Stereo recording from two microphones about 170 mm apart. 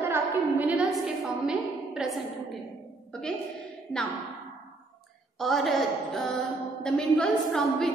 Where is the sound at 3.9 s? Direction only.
5° left (ahead or behind).